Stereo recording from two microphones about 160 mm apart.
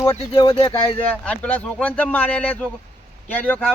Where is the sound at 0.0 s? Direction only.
15° left (ahead or behind).